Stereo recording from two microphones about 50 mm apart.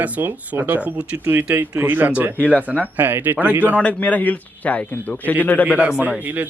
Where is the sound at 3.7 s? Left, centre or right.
Left.